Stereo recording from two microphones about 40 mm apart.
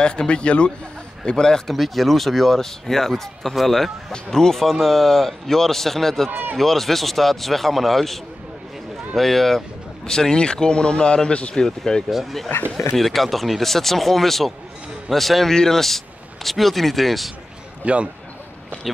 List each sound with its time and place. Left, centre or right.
0.0 s speech: left
1.7 s speech: centre; by 11.6 s left
11.6 s speech: centre
12.1 s speech: centre
12.7 s speech: centre
17.8 s a man's voice: right